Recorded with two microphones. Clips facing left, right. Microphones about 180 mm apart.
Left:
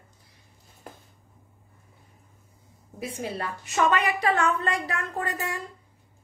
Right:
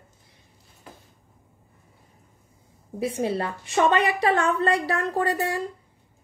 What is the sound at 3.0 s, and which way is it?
A woman's voice, 30° right (ahead or behind).